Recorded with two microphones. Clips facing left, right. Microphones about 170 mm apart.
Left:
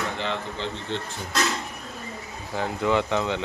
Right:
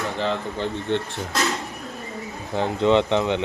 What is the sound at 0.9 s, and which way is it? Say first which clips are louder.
Speech: right 8 dB; 60° right (ahead or behind).